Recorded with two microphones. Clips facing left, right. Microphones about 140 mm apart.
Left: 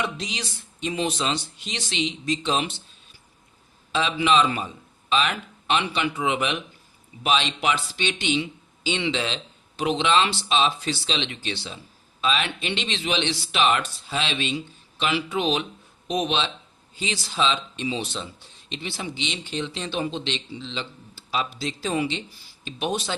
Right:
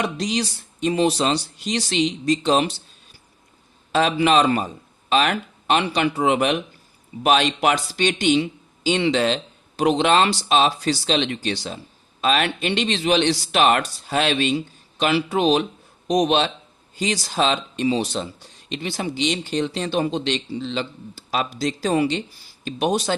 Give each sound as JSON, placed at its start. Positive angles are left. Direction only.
{"t": 0.0, "sound": "speech", "side_deg": -40}
{"t": 3.9, "sound": "a man's voice", "side_deg": -45}